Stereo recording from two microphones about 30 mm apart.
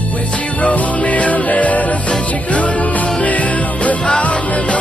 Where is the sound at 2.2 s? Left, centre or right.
Left.